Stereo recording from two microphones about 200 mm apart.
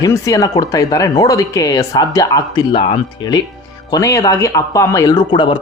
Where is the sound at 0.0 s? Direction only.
15° left (ahead or behind).